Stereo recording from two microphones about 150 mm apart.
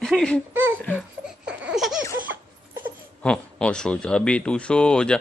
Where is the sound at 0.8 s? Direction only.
10° left (ahead or behind).